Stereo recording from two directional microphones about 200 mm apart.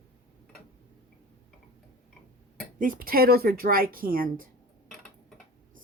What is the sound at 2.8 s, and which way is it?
Speech, 45° right (ahead or behind).